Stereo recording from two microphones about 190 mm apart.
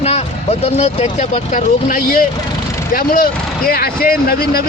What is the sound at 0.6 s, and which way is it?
Speech, 35° left (ahead or behind).